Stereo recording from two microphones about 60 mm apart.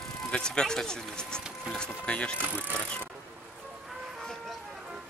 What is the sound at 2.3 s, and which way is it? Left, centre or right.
Speech, right.